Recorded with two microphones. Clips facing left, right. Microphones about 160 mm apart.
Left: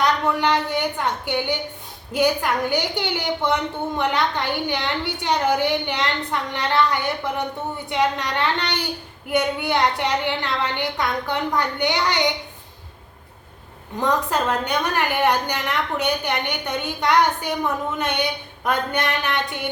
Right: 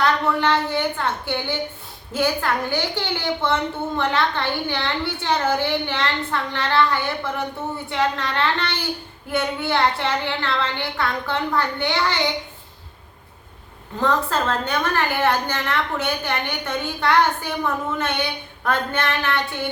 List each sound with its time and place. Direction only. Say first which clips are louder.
0.0 s a woman's voice: even; 15° left (ahead or behind)
14.0 s a woman's voice: even; 15° left (ahead or behind)